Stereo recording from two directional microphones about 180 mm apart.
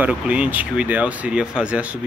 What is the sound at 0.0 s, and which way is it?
Speech, 5° right (ahead or behind).